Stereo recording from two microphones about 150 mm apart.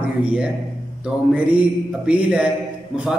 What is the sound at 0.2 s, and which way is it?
A man's voice, 10° right (ahead or behind).